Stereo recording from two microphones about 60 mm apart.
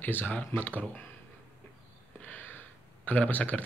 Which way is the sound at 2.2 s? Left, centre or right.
Left.